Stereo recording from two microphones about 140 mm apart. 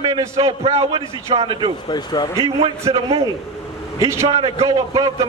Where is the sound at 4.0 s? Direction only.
20° right (ahead or behind).